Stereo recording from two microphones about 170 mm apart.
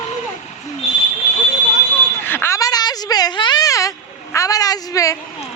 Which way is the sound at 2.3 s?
15° left (ahead or behind).